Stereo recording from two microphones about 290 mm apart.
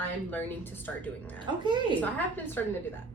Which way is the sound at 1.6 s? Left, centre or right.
Centre.